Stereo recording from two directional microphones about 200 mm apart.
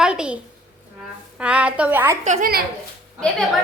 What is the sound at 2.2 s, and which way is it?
Speech, 40° right (ahead or behind).